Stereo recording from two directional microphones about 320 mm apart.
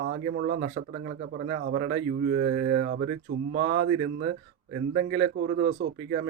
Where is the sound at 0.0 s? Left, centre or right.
Right.